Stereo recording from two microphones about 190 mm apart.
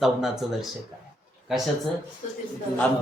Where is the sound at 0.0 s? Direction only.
Centre (ahead or behind).